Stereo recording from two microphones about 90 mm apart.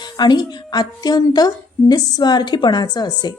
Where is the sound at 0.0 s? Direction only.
55° left (ahead or behind).